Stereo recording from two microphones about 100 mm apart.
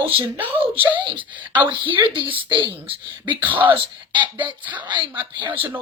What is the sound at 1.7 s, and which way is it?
A woman's voice, 55° right (ahead or behind).